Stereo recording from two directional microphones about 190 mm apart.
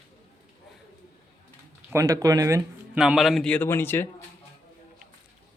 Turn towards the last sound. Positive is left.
turn(degrees=10)  # may be behind; listen again after turning